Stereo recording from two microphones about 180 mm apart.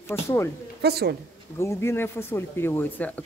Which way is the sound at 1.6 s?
15° left (ahead or behind).